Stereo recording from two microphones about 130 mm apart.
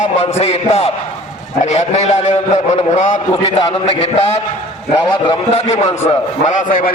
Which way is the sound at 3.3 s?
40° left (ahead or behind).